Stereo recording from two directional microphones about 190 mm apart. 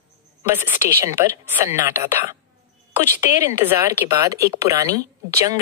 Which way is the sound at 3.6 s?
15° right (ahead or behind).